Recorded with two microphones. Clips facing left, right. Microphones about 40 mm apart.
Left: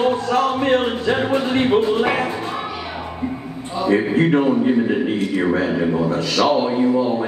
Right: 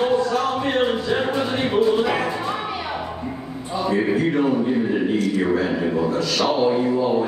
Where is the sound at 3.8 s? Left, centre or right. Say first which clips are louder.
Left 4 dB; left.